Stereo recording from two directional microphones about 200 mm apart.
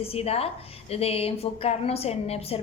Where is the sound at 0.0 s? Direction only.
30° left (ahead or behind).